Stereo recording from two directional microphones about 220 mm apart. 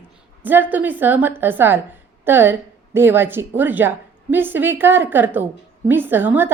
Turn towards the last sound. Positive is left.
turn(degrees=-10)  # may be behind; listen again after turning